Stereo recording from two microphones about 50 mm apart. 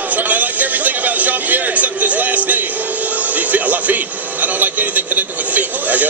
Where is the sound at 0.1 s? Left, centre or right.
Right.